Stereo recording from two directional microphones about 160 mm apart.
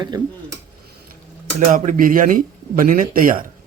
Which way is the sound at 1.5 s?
55° right (ahead or behind).